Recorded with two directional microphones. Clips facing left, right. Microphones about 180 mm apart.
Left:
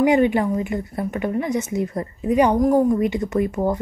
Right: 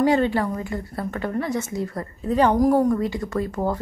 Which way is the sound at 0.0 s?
15° left (ahead or behind).